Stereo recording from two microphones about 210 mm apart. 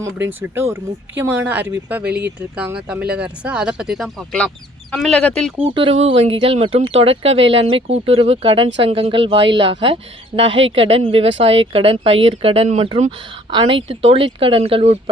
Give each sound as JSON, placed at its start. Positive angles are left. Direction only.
{"t": 1.2, "sound": "speech", "side_deg": -10}
{"t": 2.0, "sound": "speech", "side_deg": -50}
{"t": 2.6, "sound": "speech", "side_deg": -5}
{"t": 5.6, "sound": "speech", "side_deg": -25}